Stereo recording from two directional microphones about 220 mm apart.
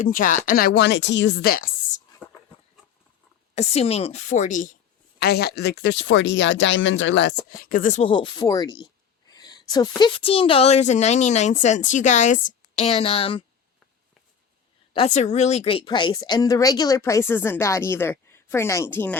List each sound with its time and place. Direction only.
0.0 s speech: 35° left (ahead or behind)
2.2 s a sound: 5° right (ahead or behind)
3.5 s a woman's voice: 30° left (ahead or behind)
5.2 s speech: 45° left (ahead or behind)
8.1 s a sound: 20° left (ahead or behind)
10.0 s speech: 25° left (ahead or behind)
14.9 s speech: 30° left (ahead or behind); by 19.1 s 10° left (ahead or behind)